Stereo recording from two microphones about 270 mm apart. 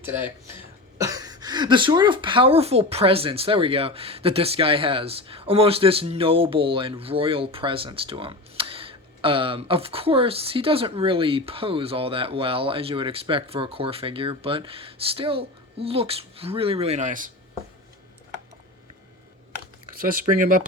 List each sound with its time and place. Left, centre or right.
0.0 s speech: centre; by 17.3 s right
20.4 s speech: right